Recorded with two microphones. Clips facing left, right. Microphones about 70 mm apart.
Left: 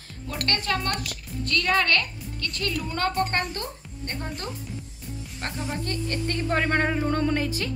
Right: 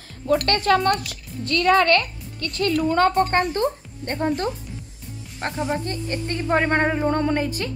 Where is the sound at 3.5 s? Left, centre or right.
Right.